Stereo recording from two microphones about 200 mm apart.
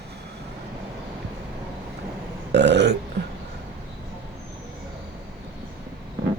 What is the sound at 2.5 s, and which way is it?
Burping, 60° right (ahead or behind).